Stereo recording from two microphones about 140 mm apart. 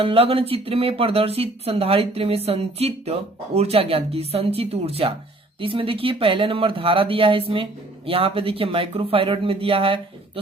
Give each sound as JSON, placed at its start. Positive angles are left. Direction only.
{"t": 0.0, "sound": "speech", "side_deg": -40}